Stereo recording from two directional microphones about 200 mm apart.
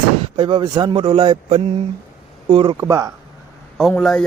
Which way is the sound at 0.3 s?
25° right (ahead or behind).